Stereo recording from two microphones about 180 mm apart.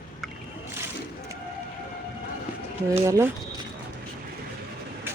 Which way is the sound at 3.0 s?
15° right (ahead or behind).